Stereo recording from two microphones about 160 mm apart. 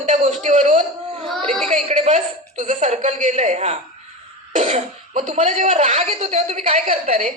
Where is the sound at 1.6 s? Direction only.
45° right (ahead or behind).